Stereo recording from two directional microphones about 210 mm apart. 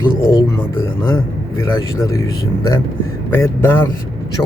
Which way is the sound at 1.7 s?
15° left (ahead or behind).